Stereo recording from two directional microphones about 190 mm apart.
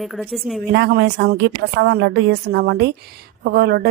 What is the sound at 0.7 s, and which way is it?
A woman's voice, 60° right (ahead or behind).